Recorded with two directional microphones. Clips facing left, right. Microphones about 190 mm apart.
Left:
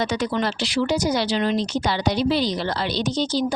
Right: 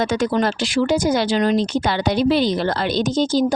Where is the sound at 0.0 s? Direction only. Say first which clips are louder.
Right 4 dB; 50° right (ahead or behind).